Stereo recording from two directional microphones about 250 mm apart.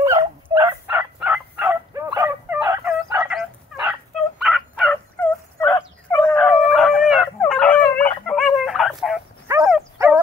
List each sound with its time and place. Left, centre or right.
0.0 s dog: centre
4.4 s turkey: centre
9.5 s dog: centre